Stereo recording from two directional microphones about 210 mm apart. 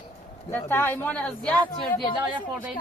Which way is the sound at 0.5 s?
10° left (ahead or behind).